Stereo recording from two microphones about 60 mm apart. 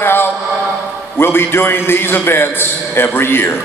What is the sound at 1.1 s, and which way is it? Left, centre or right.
A man's voice, left.